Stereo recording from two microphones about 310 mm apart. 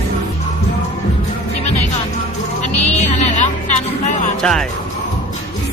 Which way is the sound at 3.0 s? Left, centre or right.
Left.